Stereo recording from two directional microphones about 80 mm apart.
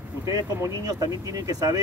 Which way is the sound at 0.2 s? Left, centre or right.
Right.